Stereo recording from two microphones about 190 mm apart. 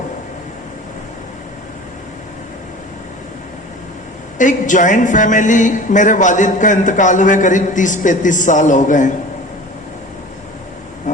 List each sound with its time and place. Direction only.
4.4 s speech: 40° left (ahead or behind)